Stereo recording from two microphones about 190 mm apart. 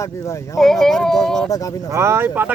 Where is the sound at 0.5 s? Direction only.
Centre (ahead or behind).